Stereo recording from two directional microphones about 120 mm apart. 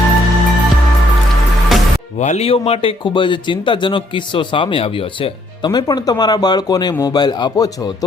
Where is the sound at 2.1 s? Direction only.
70° left (ahead or behind).